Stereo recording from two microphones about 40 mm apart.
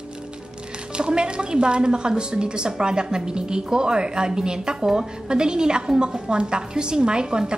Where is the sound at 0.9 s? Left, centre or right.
Right.